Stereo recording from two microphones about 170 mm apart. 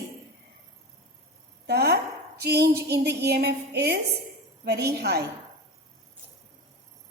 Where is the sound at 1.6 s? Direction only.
75° right (ahead or behind).